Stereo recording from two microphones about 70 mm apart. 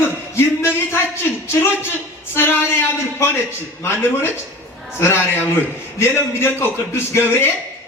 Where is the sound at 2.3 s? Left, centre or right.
Left.